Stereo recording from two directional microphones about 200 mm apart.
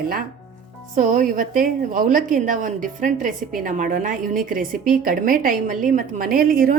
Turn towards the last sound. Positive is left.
turn(degrees=-45)  # may be behind; listen again after turning